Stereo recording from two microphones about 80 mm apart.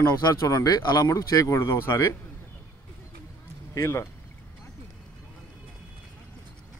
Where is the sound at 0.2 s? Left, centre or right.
Left.